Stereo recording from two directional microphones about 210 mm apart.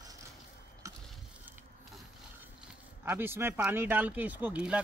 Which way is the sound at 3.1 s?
10° right (ahead or behind).